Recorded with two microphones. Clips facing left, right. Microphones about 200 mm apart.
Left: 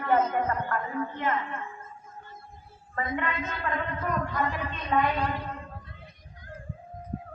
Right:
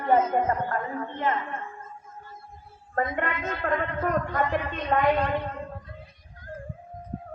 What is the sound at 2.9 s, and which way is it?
A man's voice, 50° right (ahead or behind).